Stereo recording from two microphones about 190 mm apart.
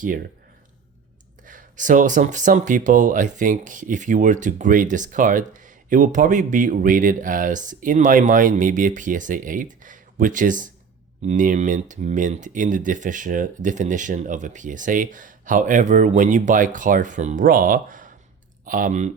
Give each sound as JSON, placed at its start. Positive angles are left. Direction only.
{"t": 1.5, "sound": "speech", "side_deg": -45}